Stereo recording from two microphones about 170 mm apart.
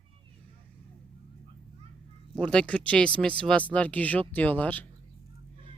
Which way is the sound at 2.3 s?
5° left (ahead or behind).